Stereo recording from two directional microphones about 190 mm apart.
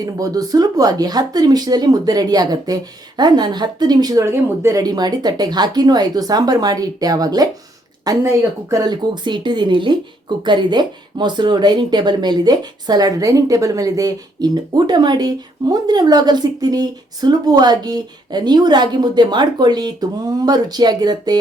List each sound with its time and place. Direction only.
0.0 s speech: 20° right (ahead or behind)